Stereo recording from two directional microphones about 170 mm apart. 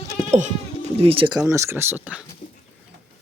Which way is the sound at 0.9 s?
35° right (ahead or behind).